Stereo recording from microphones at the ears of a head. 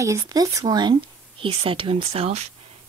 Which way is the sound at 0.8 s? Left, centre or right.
Right.